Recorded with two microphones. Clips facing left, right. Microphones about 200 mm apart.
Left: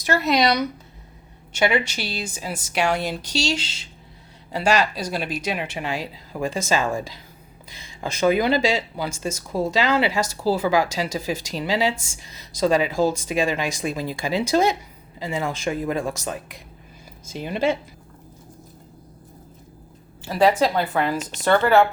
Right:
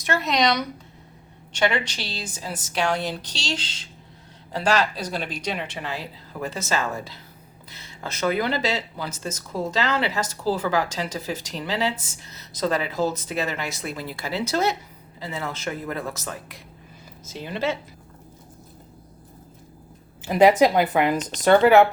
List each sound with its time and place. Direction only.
0.0 s speech: centre (ahead or behind)
20.2 s speech: 20° right (ahead or behind)